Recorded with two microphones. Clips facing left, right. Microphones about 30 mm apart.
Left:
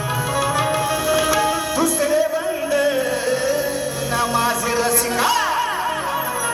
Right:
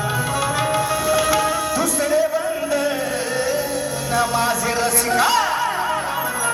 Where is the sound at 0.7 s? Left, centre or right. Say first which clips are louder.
Even; centre.